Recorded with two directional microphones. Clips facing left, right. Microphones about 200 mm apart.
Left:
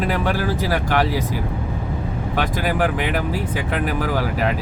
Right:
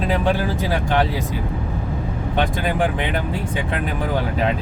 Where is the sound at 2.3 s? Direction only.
25° right (ahead or behind).